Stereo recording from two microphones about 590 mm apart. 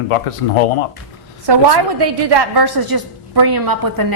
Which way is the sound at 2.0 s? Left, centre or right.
Right.